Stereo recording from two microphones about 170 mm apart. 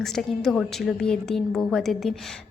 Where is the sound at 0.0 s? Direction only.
Centre (ahead or behind).